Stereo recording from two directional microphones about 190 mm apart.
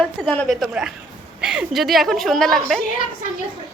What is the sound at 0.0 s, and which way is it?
Speech, centre (ahead or behind).